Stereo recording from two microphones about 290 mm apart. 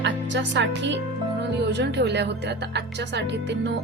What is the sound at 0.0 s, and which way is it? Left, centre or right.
A woman's voice, right.